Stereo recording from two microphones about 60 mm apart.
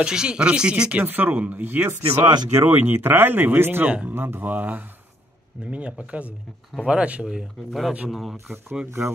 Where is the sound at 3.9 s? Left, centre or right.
Right.